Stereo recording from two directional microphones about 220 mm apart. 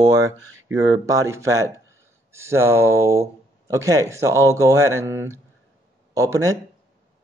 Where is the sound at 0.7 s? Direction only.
15° right (ahead or behind).